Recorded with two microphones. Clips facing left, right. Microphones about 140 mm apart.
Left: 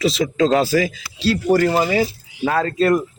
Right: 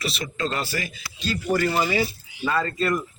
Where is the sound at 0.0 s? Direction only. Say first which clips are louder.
Left 11 dB; 90° left.